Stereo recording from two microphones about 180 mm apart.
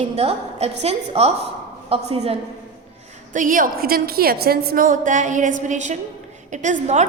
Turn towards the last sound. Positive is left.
turn(degrees=-40)  # may be behind; listen again after turning